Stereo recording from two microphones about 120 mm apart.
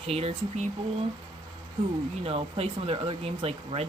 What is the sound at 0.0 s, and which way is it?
Speech, 55° right (ahead or behind).